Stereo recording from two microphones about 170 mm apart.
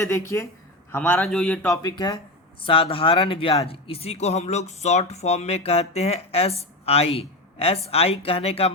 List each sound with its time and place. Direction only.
0.1 s a man's voice: 15° left (ahead or behind)
1.6 s speech: 20° left (ahead or behind); by 8.7 s 35° left (ahead or behind)